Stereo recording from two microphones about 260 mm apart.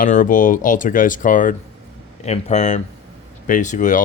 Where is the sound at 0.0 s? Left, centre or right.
Left.